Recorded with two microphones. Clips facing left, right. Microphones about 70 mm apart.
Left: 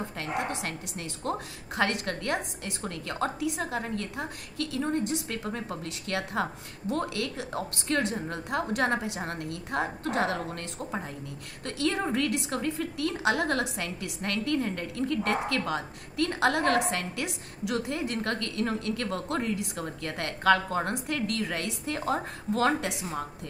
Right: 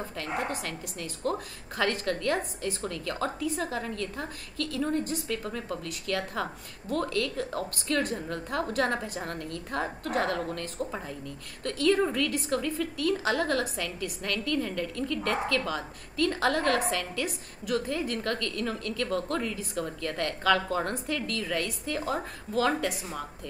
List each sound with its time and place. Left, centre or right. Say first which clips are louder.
0.2 s a woman's voice: even; left